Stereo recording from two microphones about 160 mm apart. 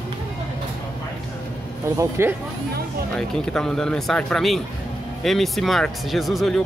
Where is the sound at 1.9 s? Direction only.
15° right (ahead or behind).